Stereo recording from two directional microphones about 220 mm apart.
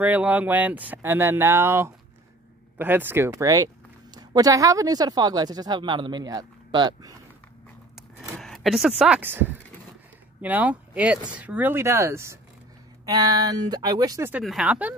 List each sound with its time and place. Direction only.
0.0 s speech: 5° right (ahead or behind)
8.4 s speech: centre (ahead or behind)
14.4 s speech: centre (ahead or behind)